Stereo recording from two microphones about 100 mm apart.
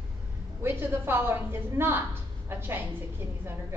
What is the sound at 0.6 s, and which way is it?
A woman's voice, 20° right (ahead or behind).